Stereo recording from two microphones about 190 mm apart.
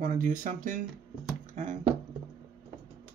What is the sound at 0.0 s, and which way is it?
Speech, 45° right (ahead or behind).